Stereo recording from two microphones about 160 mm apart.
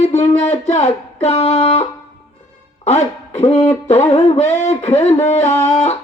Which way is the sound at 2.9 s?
45° left (ahead or behind).